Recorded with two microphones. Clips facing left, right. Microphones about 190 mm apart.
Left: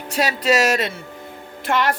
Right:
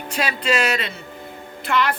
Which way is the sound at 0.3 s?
40° left (ahead or behind).